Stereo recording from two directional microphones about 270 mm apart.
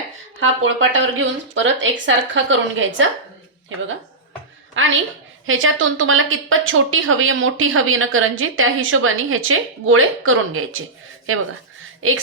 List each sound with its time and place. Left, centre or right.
0.3 s a woman's voice: right
4.7 s a woman's voice: right
12.0 s a woman's voice: right